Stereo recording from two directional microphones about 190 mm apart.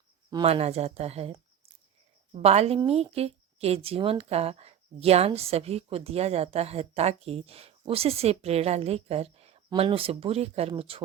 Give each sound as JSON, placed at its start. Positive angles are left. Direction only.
{"t": 0.3, "sound": "a woman's voice", "side_deg": -25}
{"t": 2.3, "sound": "a woman's voice", "side_deg": -35}